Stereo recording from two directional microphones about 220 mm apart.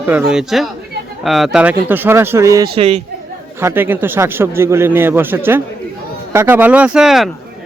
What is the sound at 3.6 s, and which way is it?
A man's voice, 10° right (ahead or behind).